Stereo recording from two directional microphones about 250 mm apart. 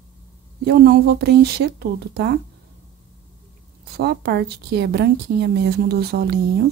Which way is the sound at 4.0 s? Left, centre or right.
Right.